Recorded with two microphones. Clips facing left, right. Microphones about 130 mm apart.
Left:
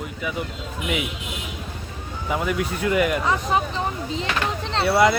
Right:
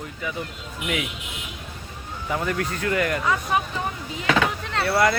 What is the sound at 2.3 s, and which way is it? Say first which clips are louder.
Speech: left 2 dB; 10° left (ahead or behind).